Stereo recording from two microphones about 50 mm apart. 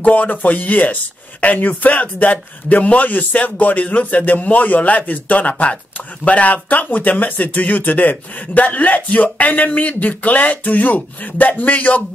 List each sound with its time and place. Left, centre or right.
0.0 s a man's voice: left